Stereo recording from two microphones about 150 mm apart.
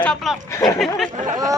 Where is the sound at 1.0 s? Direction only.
60° right (ahead or behind).